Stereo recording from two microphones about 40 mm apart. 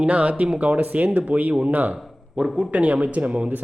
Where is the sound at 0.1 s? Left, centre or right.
Right.